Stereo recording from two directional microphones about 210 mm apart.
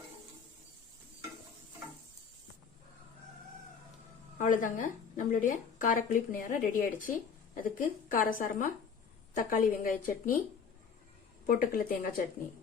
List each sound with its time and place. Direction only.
4.4 s a woman's voice: 40° left (ahead or behind)
11.4 s a woman's voice: 45° left (ahead or behind)